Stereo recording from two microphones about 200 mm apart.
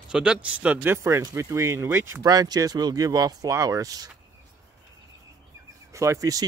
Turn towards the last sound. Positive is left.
turn(degrees=-15)  # may be behind; listen again after turning